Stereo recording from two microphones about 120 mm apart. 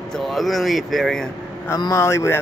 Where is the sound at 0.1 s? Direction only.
Centre (ahead or behind).